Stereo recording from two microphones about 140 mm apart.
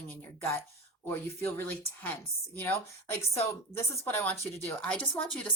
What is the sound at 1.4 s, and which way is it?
A woman's voice, 15° left (ahead or behind).